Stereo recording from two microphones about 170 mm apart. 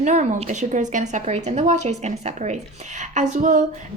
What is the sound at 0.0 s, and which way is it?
A woman's voice, 45° right (ahead or behind).